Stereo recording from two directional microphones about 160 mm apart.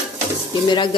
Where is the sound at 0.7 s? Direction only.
30° left (ahead or behind).